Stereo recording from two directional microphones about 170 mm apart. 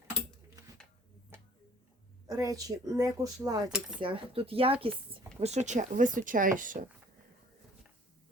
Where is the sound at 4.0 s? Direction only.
30° right (ahead or behind); by 6.8 s 50° right (ahead or behind).